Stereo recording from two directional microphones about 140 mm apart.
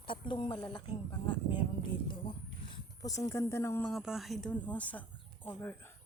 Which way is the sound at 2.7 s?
25° left (ahead or behind).